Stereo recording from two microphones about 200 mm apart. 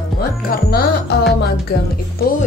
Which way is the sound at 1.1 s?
55° left (ahead or behind).